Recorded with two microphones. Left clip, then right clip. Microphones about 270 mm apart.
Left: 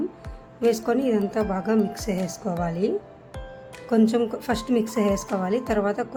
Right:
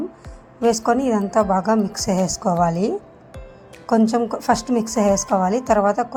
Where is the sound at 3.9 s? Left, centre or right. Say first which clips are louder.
Right 3 dB; centre.